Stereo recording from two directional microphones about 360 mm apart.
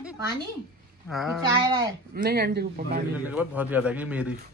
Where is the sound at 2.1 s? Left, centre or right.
Right.